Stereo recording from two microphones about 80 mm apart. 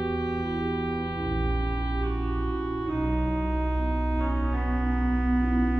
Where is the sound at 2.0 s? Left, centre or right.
Centre.